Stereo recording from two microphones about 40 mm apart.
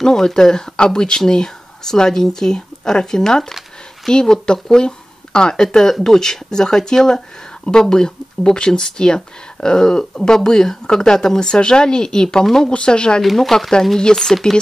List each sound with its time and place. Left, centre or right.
0.0 s speech: centre
13.2 s speech: centre